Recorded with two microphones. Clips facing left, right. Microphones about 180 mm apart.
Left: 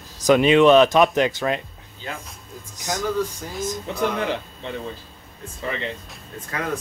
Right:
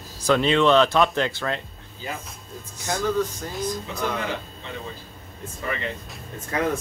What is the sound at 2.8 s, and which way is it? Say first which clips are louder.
Speech: even; 15° left (ahead or behind).